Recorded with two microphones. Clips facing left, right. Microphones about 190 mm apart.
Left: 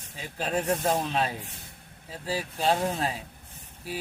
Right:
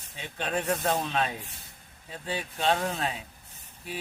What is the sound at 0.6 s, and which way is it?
Speech, 30° left (ahead or behind).